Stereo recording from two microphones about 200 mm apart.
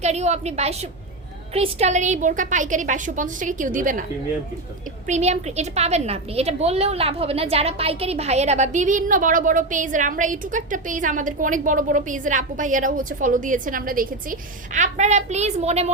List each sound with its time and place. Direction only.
0.0 s a woman's voice: 35° right (ahead or behind)
5.0 s a woman's voice: 35° right (ahead or behind)